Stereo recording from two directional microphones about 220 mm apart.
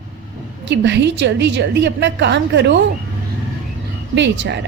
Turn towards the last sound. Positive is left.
turn(degrees=-55)  # may be behind; listen again after turning